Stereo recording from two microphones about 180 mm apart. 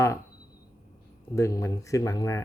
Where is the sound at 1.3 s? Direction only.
15° left (ahead or behind).